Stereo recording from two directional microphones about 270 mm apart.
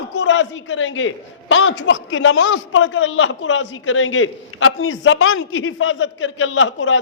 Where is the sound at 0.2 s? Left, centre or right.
Left.